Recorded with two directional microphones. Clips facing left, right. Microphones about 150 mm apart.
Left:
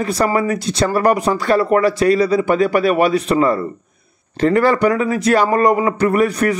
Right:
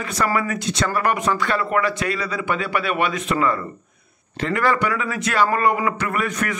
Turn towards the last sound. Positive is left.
turn(degrees=35)  # may be behind; listen again after turning